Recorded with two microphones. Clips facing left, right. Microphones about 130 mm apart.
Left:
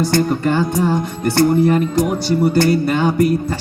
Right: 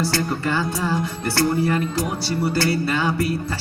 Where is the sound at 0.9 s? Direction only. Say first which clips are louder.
Left 6 dB; 20° left (ahead or behind).